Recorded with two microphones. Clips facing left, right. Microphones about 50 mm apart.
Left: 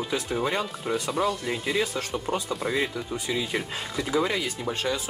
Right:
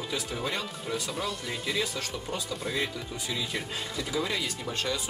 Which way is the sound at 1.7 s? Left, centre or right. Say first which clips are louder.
Left 4 dB; left.